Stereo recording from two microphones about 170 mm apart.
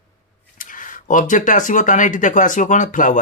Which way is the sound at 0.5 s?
50° left (ahead or behind).